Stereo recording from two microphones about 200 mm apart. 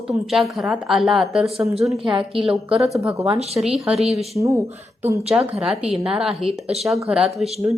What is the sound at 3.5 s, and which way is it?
Speech, 5° right (ahead or behind).